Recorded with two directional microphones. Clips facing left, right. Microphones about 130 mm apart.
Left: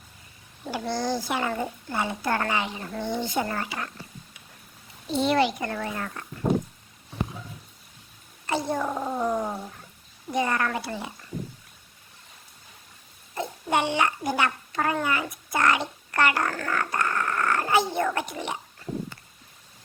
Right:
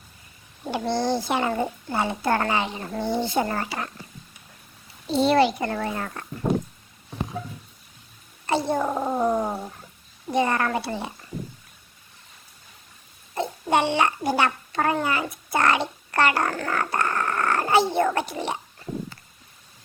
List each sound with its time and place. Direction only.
0.6 s a child's voice: 25° right (ahead or behind)
5.0 s a child's voice: 35° right (ahead or behind)
8.4 s a child's voice: 30° right (ahead or behind)
13.3 s a child's voice: 30° right (ahead or behind)